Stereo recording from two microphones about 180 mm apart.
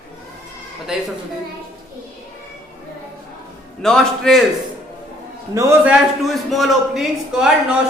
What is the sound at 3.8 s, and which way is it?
Speech, 5° left (ahead or behind).